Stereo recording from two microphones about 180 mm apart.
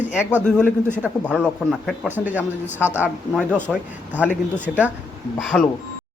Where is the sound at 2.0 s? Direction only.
10° right (ahead or behind).